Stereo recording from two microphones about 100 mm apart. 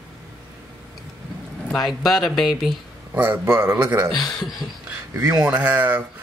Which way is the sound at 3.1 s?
20° right (ahead or behind).